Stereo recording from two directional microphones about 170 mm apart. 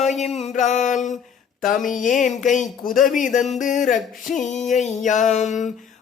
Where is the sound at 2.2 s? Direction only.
45° left (ahead or behind).